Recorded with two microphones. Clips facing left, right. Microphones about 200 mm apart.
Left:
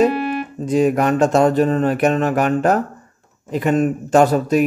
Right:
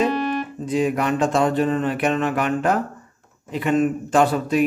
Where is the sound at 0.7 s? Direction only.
45° left (ahead or behind).